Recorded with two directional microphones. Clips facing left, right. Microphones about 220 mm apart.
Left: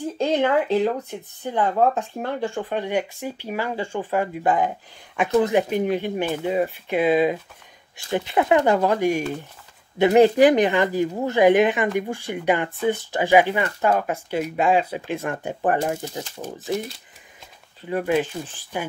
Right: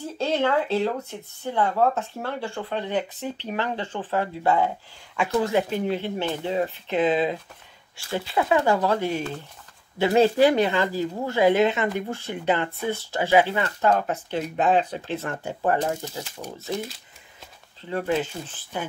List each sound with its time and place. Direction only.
0.0 s speech: 15° left (ahead or behind)
16.4 s speech: 35° left (ahead or behind)
17.8 s speech: 15° left (ahead or behind)